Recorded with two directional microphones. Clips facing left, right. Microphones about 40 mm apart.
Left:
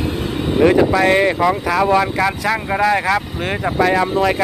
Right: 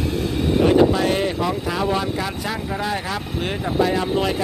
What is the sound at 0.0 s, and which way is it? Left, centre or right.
Vehicle, left.